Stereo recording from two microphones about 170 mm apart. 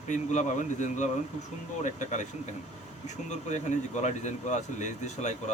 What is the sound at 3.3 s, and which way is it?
A man's voice, 45° left (ahead or behind).